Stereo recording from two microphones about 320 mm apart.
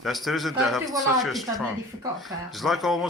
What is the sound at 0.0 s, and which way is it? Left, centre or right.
Speech, centre.